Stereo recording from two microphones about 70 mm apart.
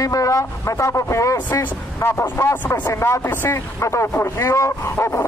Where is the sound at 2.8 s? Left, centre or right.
Left.